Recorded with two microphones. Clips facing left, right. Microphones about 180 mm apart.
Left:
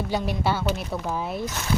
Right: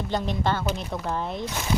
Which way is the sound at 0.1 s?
10° left (ahead or behind).